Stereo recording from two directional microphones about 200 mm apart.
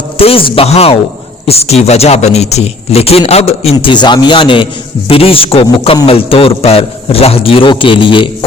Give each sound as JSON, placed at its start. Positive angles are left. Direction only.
{"t": 0.2, "sound": "a man's voice", "side_deg": 30}